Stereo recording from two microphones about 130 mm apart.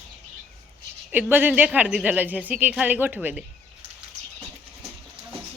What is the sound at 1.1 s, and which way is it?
A woman's voice, 15° right (ahead or behind).